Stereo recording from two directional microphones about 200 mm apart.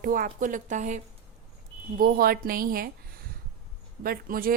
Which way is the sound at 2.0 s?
45° right (ahead or behind).